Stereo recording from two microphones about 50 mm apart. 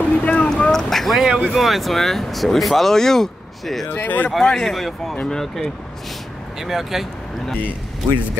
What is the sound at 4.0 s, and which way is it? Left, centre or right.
Speech, left.